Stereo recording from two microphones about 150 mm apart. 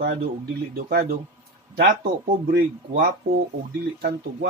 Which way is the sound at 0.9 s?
75° right (ahead or behind).